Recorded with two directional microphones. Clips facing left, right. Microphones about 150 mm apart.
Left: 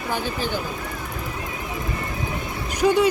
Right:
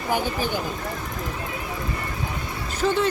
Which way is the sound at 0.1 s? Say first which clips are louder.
Right 2 dB; 15° right (ahead or behind).